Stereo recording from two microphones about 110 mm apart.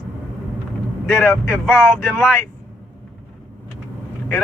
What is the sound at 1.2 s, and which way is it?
Speech, 20° left (ahead or behind).